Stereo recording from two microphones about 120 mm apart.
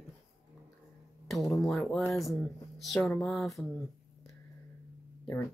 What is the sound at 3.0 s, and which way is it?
Speech, 10° left (ahead or behind).